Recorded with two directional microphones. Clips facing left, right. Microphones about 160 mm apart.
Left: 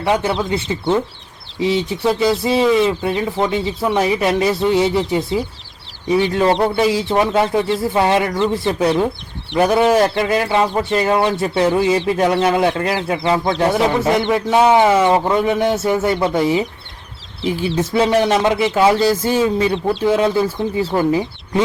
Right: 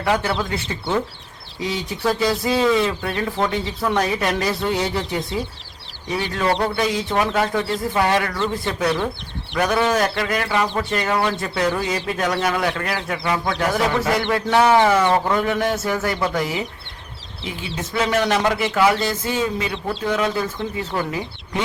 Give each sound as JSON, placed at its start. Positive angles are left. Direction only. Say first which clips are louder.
{"t": 0.0, "sound": "speech", "louder": "left 3 dB", "side_deg": 20}
{"t": 6.1, "sound": "speech", "louder": "left 6 dB", "side_deg": 25}
{"t": 17.9, "sound": "speech", "louder": "left 4 dB", "side_deg": 30}